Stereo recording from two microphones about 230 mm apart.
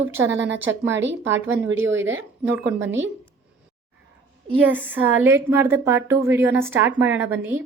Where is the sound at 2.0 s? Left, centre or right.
Right.